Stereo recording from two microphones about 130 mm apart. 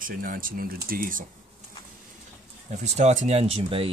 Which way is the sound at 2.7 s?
60° right (ahead or behind).